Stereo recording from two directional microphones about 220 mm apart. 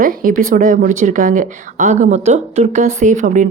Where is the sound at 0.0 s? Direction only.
40° right (ahead or behind).